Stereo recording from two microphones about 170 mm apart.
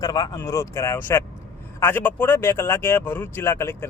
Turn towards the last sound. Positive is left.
turn(degrees=15)  # may be behind; listen again after turning